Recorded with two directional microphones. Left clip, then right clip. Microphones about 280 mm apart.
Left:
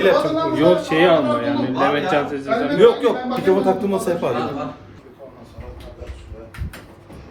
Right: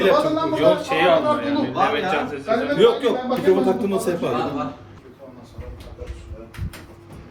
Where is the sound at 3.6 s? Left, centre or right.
Centre.